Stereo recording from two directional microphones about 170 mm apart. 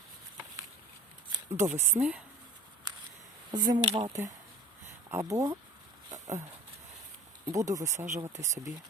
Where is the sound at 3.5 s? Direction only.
25° right (ahead or behind).